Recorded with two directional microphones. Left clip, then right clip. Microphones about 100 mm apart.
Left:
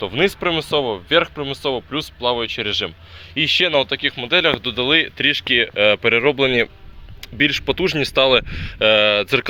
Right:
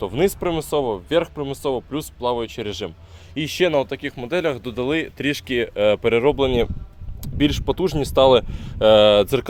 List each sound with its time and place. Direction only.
0.0 s speech: 50° right (ahead or behind)
3.3 s speech: 65° right (ahead or behind)